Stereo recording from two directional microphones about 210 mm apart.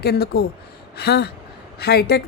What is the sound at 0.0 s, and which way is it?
A woman's voice, 50° left (ahead or behind).